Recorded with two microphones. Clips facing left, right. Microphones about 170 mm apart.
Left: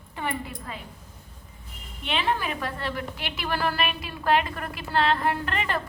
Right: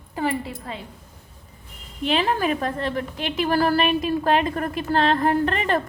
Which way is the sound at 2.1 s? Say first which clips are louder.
Right 6 dB; 40° right (ahead or behind).